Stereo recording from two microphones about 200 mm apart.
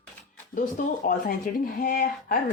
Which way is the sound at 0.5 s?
40° left (ahead or behind).